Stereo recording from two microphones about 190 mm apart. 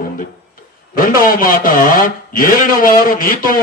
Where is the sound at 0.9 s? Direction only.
50° left (ahead or behind).